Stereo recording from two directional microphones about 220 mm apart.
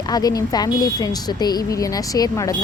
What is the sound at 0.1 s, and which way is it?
A woman's voice, 15° left (ahead or behind).